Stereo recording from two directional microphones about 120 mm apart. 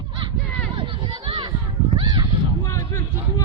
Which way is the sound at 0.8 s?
45° right (ahead or behind).